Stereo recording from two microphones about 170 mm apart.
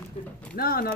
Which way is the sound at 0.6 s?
60° left (ahead or behind).